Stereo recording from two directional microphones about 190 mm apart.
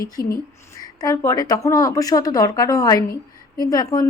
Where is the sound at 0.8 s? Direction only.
15° left (ahead or behind).